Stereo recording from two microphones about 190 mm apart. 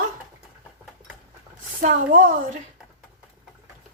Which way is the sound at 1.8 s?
45° right (ahead or behind).